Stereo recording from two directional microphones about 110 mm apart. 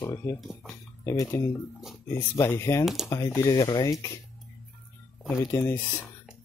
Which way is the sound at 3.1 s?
25° left (ahead or behind).